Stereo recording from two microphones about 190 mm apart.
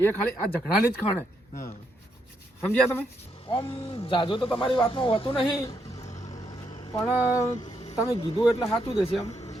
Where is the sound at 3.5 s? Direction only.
25° left (ahead or behind).